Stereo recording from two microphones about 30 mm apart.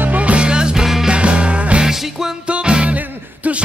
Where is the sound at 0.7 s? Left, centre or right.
Centre.